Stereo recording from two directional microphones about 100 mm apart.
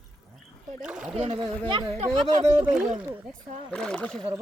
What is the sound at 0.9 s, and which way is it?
Speech, 10° right (ahead or behind).